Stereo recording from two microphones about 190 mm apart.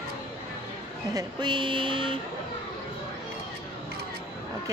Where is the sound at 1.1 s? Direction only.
25° right (ahead or behind).